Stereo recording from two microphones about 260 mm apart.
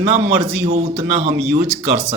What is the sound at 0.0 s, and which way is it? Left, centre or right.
Speech, right.